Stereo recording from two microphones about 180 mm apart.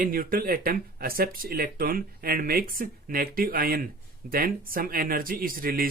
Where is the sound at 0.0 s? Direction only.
50° right (ahead or behind).